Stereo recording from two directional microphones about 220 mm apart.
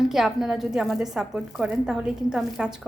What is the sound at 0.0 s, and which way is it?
A woman's voice, centre (ahead or behind).